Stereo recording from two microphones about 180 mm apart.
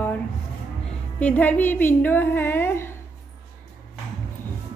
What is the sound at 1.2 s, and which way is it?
A woman's voice, 10° left (ahead or behind).